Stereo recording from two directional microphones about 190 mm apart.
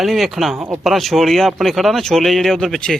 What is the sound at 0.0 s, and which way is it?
Speech, centre (ahead or behind).